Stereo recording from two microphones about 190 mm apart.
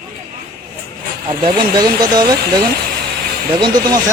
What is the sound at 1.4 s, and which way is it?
Speech, 25° right (ahead or behind).